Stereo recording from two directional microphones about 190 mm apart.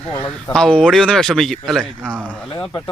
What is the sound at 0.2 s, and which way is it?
Speech, 5° left (ahead or behind).